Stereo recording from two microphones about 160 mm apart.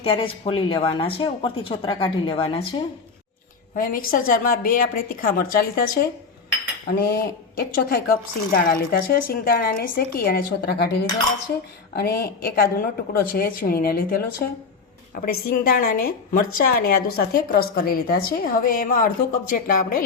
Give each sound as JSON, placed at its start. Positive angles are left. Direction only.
{"t": 0.0, "sound": "speech", "side_deg": 35}
{"t": 3.8, "sound": "a woman's voice", "side_deg": 60}